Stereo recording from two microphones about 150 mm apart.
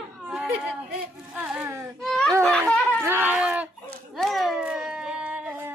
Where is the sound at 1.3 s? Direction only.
5° right (ahead or behind).